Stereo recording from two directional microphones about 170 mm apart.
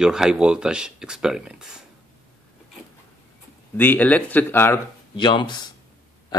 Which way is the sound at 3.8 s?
10° left (ahead or behind).